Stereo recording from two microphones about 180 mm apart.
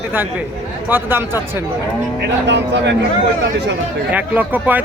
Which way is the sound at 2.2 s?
75° right (ahead or behind).